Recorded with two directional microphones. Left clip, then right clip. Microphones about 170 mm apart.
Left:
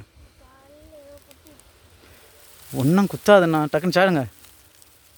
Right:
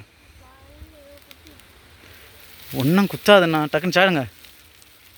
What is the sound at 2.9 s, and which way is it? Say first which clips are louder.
Speech: right 1 dB; 15° left (ahead or behind).